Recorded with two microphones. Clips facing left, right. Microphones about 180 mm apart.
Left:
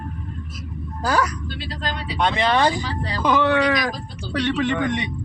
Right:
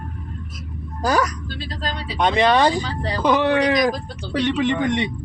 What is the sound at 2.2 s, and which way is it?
Speech, 20° right (ahead or behind).